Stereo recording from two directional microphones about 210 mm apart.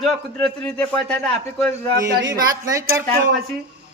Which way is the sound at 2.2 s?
15° right (ahead or behind).